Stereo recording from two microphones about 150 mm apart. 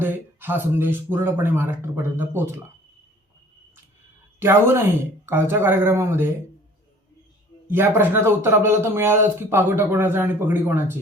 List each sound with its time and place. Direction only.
0.0 s a man's voice: 15° right (ahead or behind)
4.4 s a man's voice: 15° right (ahead or behind)
7.7 s a man's voice: 15° right (ahead or behind)